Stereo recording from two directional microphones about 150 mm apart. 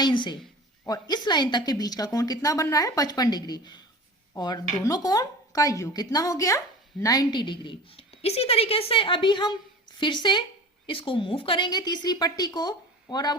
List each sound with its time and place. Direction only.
0.0 s a woman's voice: 30° left (ahead or behind)